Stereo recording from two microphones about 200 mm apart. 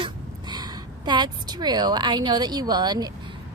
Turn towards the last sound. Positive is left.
turn(degrees=-20)  # may be behind; listen again after turning